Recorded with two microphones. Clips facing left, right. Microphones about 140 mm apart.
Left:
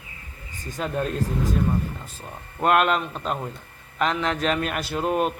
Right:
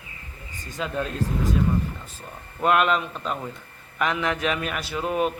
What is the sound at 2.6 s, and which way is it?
A man's voice, 45° left (ahead or behind).